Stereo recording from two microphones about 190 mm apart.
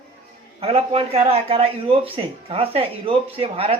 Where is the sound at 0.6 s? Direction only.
30° right (ahead or behind).